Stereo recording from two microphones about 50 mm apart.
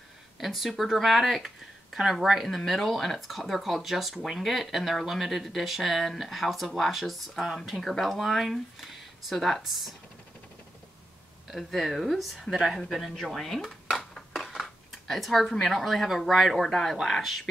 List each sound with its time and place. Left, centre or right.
0.4 s speech: centre
11.5 s speech: centre
13.1 s dishes: centre
15.6 s speech: centre